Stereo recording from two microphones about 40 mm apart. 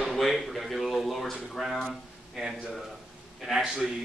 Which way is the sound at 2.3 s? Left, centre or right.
Centre.